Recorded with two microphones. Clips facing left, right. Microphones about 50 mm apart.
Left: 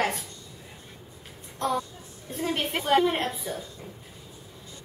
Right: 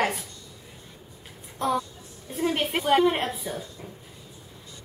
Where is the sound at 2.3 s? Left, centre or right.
Centre.